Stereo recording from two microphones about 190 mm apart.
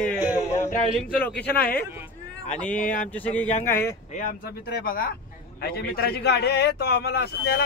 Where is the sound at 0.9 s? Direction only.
5° left (ahead or behind).